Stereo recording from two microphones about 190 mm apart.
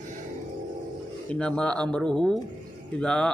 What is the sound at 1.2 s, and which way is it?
A man's voice, 5° left (ahead or behind).